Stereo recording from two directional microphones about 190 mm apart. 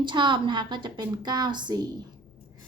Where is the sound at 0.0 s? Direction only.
25° right (ahead or behind).